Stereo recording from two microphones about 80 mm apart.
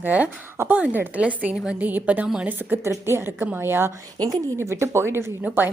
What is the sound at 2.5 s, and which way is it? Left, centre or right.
Speech, right.